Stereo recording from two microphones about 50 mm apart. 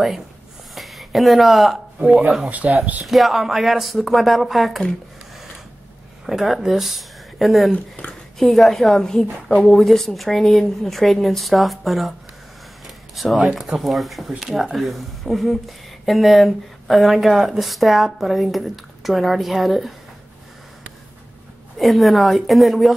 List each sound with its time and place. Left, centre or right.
0.7 s speech: centre
2.0 s speech: right
3.1 s speech: centre
6.2 s speech: centre
7.7 s speech: left
8.4 s a woman's voice: centre
12.8 s a sound: centre
13.6 s speech: centre
21.7 s speech: centre